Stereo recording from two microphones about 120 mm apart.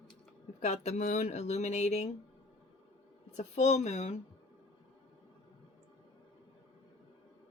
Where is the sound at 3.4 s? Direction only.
65° left (ahead or behind).